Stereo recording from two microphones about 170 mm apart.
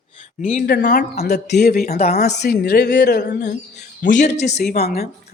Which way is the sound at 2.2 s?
75° left (ahead or behind).